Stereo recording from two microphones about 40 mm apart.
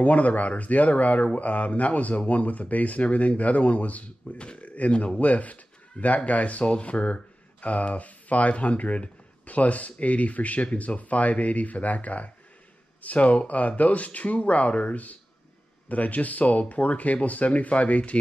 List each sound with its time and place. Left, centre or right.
0.0 s speech: left